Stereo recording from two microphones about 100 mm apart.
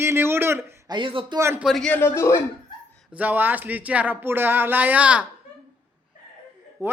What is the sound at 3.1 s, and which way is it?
Speech, 15° right (ahead or behind).